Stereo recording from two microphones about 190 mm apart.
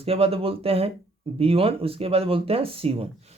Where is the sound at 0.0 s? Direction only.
30° right (ahead or behind).